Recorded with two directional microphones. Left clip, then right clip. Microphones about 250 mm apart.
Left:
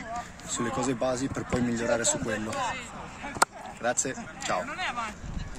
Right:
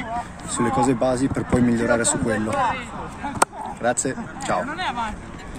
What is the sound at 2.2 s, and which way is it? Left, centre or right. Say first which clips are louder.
Speech: right 9 dB; left.